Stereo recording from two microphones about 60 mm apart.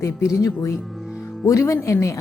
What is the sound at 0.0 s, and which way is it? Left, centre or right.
Speech, left.